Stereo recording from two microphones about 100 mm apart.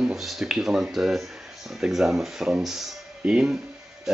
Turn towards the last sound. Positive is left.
turn(degrees=-10)  # may be behind; listen again after turning